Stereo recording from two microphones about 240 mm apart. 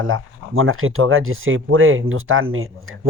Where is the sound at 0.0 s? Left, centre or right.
Right.